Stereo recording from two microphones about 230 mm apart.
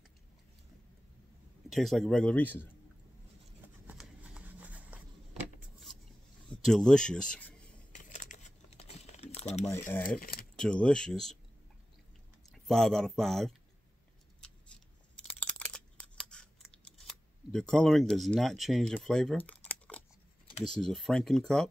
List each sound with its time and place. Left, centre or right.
1.7 s speech: centre
3.8 s a sound: centre
6.5 s speech: centre
7.9 s crumpling: left
9.8 s speech: centre
10.1 s speech: left
10.5 s speech: centre
12.4 s speech: centre
15.3 s a sound: centre
16.3 s scissors: centre
20.7 s speech: centre